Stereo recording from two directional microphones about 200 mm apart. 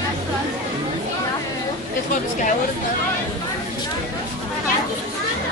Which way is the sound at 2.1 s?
40° left (ahead or behind).